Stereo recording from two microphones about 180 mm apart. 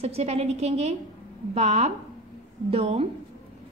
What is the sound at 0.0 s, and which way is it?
A woman's voice, 35° right (ahead or behind).